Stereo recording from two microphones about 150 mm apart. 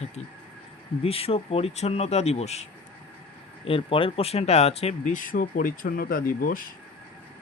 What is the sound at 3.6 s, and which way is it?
Speech, 35° left (ahead or behind).